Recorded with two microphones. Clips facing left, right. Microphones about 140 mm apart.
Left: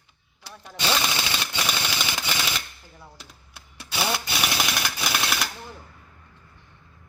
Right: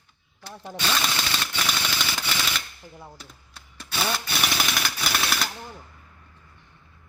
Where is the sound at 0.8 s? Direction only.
15° left (ahead or behind).